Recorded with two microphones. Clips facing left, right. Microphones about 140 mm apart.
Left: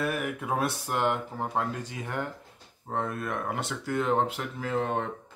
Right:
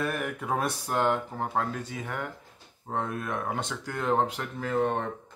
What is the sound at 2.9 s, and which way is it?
Speech, centre (ahead or behind).